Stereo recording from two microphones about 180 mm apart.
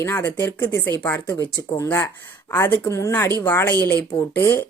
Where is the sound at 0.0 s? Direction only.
10° left (ahead or behind).